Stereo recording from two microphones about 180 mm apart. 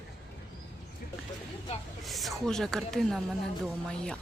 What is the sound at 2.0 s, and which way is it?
Speech, centre (ahead or behind).